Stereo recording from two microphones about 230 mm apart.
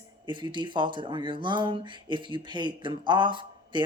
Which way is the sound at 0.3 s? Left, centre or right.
Centre.